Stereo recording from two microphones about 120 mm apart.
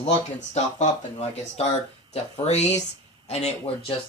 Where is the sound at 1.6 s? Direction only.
60° left (ahead or behind).